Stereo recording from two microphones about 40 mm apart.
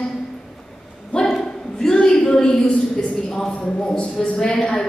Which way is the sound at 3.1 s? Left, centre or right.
Centre.